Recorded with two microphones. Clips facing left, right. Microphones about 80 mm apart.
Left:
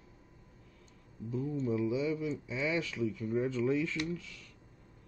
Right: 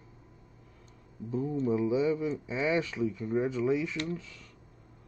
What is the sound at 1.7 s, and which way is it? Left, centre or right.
Speech, right.